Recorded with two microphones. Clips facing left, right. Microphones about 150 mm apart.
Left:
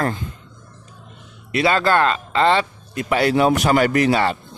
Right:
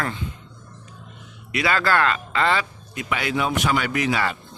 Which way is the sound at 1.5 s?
30° left (ahead or behind).